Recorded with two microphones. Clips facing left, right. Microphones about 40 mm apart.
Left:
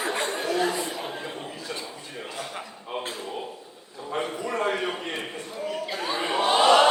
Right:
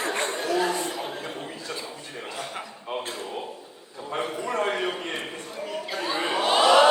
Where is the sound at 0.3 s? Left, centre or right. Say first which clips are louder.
Even; centre.